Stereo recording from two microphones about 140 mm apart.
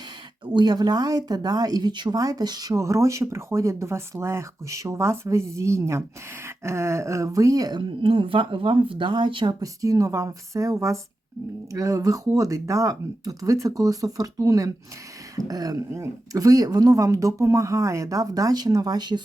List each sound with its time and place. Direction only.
0.5 s speech: 30° right (ahead or behind)